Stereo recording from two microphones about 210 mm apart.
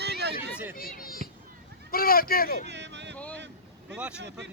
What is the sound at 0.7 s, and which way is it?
Speech, 45° left (ahead or behind).